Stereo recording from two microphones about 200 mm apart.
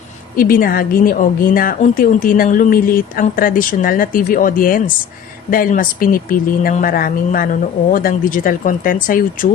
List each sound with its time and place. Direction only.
0.3 s speech: 45° left (ahead or behind)